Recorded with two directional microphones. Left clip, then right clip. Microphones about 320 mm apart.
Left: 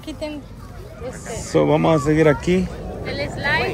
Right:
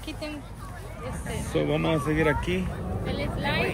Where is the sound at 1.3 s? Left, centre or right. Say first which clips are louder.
Left 10 dB; left.